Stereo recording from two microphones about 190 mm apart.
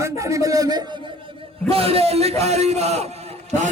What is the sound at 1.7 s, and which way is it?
A man's voice, 30° right (ahead or behind).